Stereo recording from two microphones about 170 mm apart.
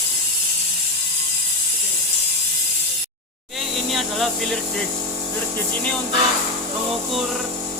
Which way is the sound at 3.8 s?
Centre (ahead or behind).